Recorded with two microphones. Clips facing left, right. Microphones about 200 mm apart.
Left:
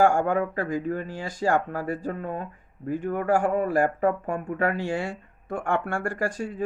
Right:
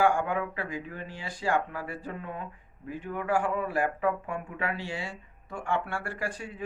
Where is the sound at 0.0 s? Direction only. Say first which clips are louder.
Left 5 dB; 45° left (ahead or behind).